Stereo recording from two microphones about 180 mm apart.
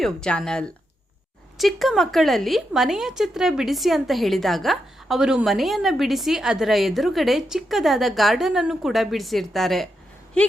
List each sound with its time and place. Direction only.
0.0 s speech: 5° left (ahead or behind)